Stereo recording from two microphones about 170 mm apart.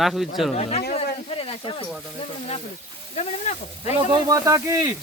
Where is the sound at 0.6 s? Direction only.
35° left (ahead or behind).